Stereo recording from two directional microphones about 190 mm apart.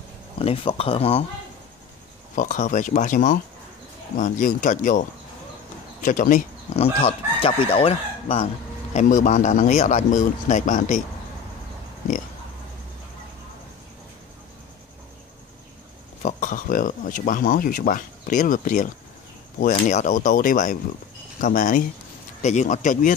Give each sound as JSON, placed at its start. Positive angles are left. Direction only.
{"t": 0.4, "sound": "speech", "side_deg": 30}
{"t": 2.3, "sound": "speech", "side_deg": 40}
{"t": 8.9, "sound": "speech", "side_deg": 40}
{"t": 16.2, "sound": "speech", "side_deg": 40}